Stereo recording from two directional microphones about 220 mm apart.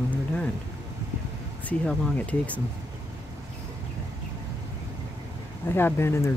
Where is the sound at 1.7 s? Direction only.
5° left (ahead or behind).